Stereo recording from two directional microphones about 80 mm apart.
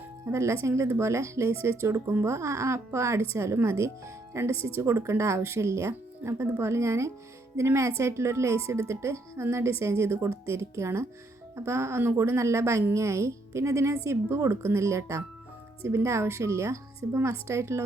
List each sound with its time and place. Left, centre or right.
0.3 s speech: right